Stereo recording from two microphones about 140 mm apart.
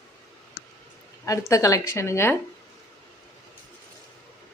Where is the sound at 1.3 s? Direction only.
25° left (ahead or behind).